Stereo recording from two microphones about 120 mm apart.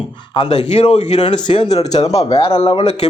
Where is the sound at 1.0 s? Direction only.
70° left (ahead or behind).